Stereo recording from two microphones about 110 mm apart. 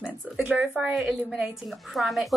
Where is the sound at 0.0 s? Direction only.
10° right (ahead or behind).